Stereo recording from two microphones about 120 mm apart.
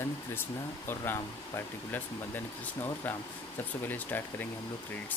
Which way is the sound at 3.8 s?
15° left (ahead or behind).